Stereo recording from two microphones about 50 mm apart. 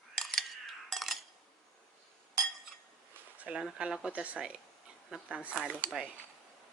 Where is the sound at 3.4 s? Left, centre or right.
Centre.